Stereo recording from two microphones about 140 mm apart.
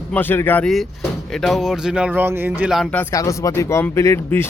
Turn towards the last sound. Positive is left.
turn(degrees=20)  # may be behind; listen again after turning